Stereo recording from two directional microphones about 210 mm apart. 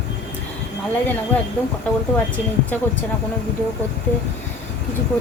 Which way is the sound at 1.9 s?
5° left (ahead or behind).